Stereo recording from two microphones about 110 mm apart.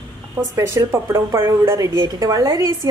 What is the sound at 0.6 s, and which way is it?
A woman's voice, 25° right (ahead or behind).